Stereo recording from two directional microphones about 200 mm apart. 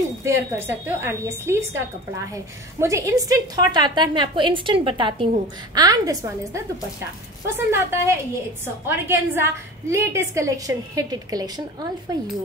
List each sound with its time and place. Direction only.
0.2 s a woman's voice: 10° right (ahead or behind)